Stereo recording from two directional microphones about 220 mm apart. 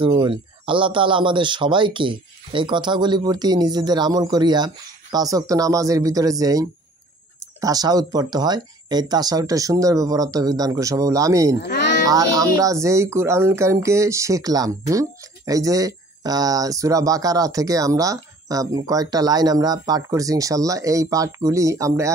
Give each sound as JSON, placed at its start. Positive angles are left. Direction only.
{"t": 0.0, "sound": "speech", "side_deg": -20}